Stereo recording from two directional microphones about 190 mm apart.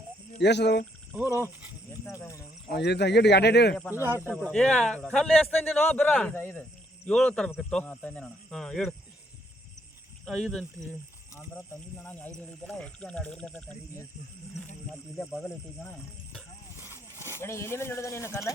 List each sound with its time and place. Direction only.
0.3 s speech: 65° left (ahead or behind)
1.3 s speech: 10° right (ahead or behind)
2.0 s speech: 15° left (ahead or behind)
2.6 s speech: 60° left (ahead or behind)
3.9 s speech: 15° right (ahead or behind)
4.4 s a man's voice: 5° left (ahead or behind)
10.2 s a man's voice: 5° left (ahead or behind)
15.3 s a man's voice: centre (ahead or behind)
16.7 s a sound: 10° right (ahead or behind)
17.4 s speech: 15° left (ahead or behind)